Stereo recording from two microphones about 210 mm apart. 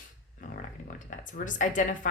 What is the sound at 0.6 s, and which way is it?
Speech, 40° left (ahead or behind).